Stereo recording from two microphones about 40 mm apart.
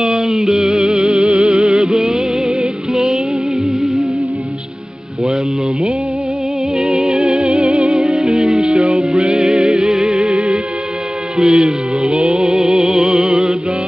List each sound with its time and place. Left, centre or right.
0.0 s music: centre
5.2 s music: centre